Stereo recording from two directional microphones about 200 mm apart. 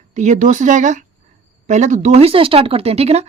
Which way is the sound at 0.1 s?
35° right (ahead or behind).